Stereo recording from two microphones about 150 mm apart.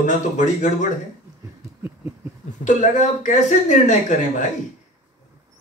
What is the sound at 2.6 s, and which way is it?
Speech, 55° left (ahead or behind).